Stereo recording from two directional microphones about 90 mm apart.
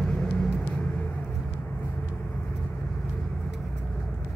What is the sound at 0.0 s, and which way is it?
Vehicle, 10° left (ahead or behind).